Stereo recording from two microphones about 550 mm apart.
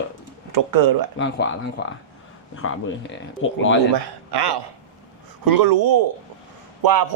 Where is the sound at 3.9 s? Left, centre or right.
Right.